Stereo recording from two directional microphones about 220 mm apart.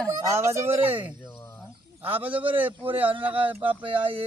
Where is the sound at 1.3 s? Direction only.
10° left (ahead or behind).